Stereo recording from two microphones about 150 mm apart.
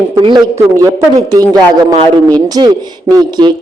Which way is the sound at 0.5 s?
20° right (ahead or behind).